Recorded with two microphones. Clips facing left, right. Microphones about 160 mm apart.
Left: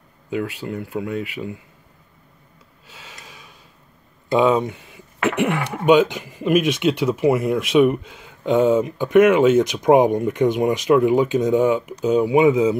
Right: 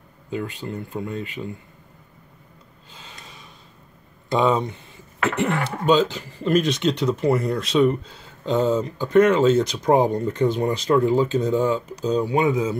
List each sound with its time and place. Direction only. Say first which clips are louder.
0.6 s speech: left 3 dB; 10° left (ahead or behind)
2.9 s snort: left 1 dB; 10° left (ahead or behind)
4.3 s speech: left 3 dB; 10° left (ahead or behind)